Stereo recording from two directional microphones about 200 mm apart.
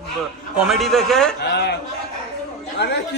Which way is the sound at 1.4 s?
55° left (ahead or behind).